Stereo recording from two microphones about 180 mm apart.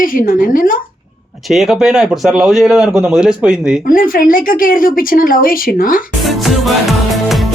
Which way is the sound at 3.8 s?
50° left (ahead or behind).